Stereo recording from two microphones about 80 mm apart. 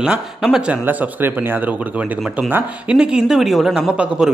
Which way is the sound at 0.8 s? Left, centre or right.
Right.